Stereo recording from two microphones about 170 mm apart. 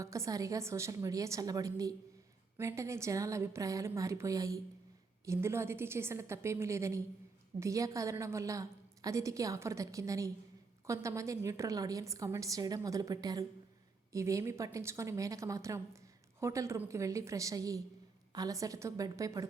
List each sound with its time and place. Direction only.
0.0 s a woman's voice: 20° right (ahead or behind)